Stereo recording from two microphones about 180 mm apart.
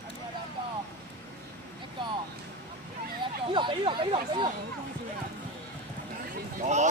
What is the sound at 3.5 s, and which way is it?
Chatter, 25° right (ahead or behind).